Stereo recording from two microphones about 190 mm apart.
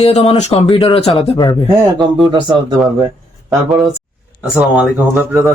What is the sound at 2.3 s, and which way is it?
Speech, 25° right (ahead or behind).